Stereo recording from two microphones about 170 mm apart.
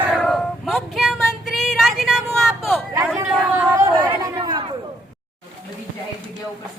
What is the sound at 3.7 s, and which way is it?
Chatter, 20° right (ahead or behind).